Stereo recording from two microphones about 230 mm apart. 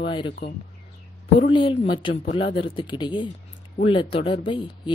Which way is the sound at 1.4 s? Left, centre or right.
Left.